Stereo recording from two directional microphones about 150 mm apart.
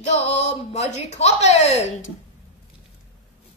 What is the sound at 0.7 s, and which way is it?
Speech, 45° left (ahead or behind).